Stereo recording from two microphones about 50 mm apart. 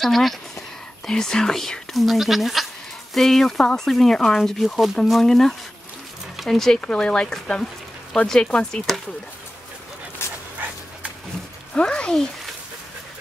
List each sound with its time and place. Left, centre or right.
0.0 s speech: centre
6.8 s speech: left
10.2 s dog: left
11.7 s speech: centre